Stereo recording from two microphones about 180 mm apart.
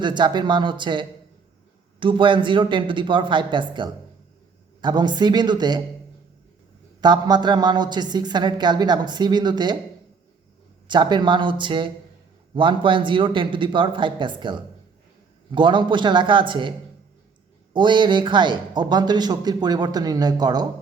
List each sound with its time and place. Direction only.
0.0 s speech: 25° right (ahead or behind)
7.0 s speech: 25° right (ahead or behind)
10.8 s speech: 25° right (ahead or behind)
17.7 s speech: 25° right (ahead or behind)